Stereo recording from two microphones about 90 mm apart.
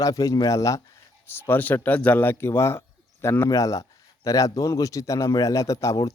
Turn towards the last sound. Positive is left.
turn(degrees=35)  # may be behind; listen again after turning